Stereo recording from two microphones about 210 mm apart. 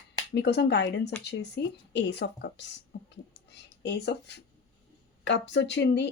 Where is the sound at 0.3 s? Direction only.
55° left (ahead or behind).